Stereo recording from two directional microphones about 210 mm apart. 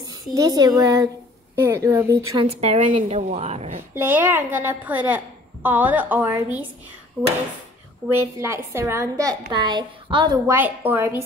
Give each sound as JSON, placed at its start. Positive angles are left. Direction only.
{"t": 0.0, "sound": "a woman's voice", "side_deg": -15}
{"t": 2.3, "sound": "a woman's voice", "side_deg": -25}
{"t": 3.9, "sound": "a woman's voice", "side_deg": -10}